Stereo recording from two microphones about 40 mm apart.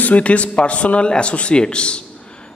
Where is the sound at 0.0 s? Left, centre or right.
Left.